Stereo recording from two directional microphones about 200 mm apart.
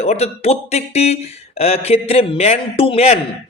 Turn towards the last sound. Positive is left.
turn(degrees=30)  # may be behind; listen again after turning